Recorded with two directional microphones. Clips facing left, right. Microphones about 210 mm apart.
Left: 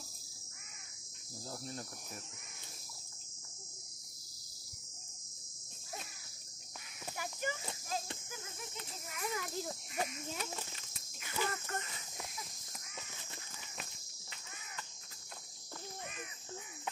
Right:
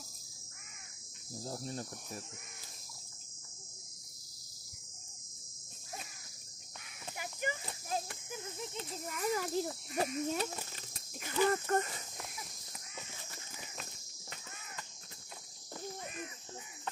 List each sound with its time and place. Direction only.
1.4 s cricket: 35° right (ahead or behind)
7.2 s horse: 15° right (ahead or behind)
8.3 s speech: 30° right (ahead or behind)
9.9 s cricket: 40° right (ahead or behind)